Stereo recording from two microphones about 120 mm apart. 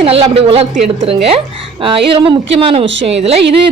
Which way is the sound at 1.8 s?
45° right (ahead or behind).